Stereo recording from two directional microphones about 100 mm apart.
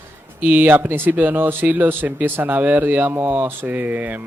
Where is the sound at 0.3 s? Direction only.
20° right (ahead or behind).